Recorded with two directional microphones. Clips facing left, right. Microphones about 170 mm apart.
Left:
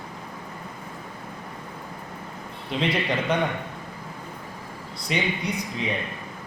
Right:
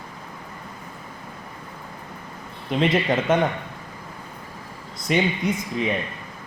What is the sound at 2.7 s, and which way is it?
Speech, 50° right (ahead or behind).